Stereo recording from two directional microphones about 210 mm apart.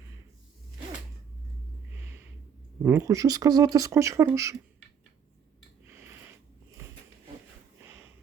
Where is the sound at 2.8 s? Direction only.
15° right (ahead or behind).